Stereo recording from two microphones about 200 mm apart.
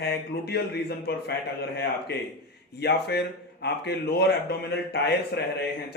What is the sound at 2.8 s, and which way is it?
Speech, 55° left (ahead or behind).